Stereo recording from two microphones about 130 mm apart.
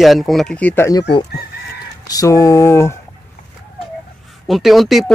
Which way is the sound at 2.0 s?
25° left (ahead or behind).